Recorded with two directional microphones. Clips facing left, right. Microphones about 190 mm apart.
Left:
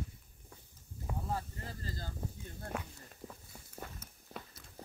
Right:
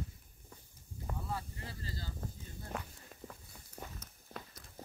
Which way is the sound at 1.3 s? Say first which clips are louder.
Left 4 dB; 45° left (ahead or behind).